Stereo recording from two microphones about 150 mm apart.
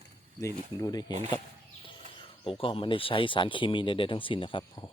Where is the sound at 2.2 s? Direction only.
35° left (ahead or behind).